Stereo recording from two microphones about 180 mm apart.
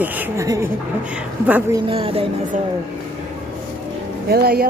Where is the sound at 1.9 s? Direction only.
30° right (ahead or behind).